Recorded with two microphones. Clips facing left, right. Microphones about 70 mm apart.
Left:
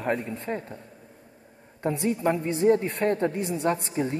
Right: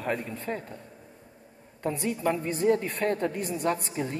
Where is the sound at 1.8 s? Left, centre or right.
Left.